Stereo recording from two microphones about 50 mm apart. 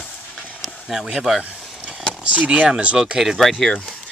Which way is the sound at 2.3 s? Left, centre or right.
Right.